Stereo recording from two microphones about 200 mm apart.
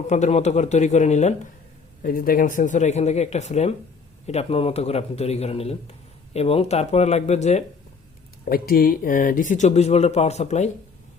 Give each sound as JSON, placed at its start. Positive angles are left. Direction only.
{"t": 0.1, "sound": "a man's voice", "side_deg": 35}
{"t": 2.0, "sound": "a man's voice", "side_deg": 45}
{"t": 8.4, "sound": "a man's voice", "side_deg": 45}